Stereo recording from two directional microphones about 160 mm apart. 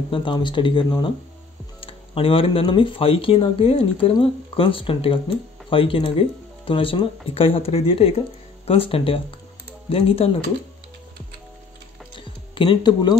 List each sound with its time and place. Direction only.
0.1 s speech: 30° left (ahead or behind)
12.2 s music: 30° left (ahead or behind)